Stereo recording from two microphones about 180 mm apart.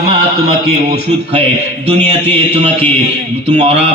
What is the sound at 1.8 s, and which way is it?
A man's voice, 35° right (ahead or behind).